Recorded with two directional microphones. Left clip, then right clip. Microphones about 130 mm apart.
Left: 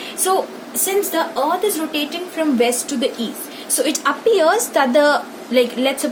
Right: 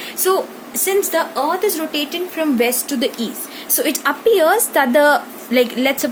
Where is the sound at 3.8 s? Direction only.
55° right (ahead or behind).